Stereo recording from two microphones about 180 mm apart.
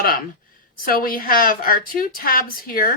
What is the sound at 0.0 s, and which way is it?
A woman's voice, 50° left (ahead or behind).